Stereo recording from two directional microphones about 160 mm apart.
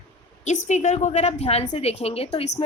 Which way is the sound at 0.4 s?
50° left (ahead or behind).